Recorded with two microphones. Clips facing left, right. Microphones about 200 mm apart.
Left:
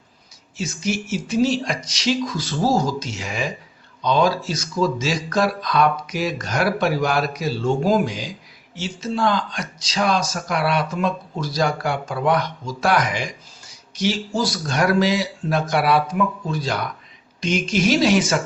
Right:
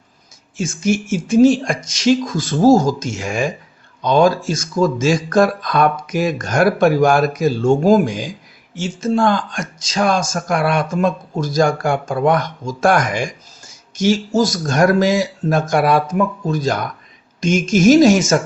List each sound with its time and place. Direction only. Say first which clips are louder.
0.5 s speech: right 6 dB; 50° right (ahead or behind)